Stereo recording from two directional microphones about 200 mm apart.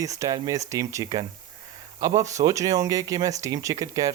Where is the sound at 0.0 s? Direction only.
15° right (ahead or behind).